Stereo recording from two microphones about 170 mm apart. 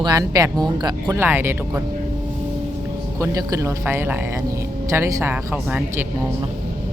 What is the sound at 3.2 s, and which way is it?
Speech, 20° right (ahead or behind).